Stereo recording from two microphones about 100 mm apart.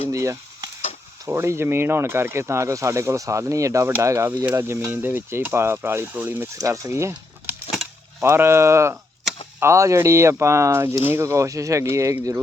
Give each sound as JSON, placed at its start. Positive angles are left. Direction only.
{"t": 0.1, "sound": "speech", "side_deg": -30}
{"t": 8.2, "sound": "speech", "side_deg": -25}